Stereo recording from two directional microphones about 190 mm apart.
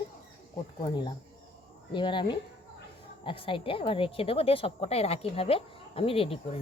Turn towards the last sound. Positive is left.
turn(degrees=30)  # may be behind; listen again after turning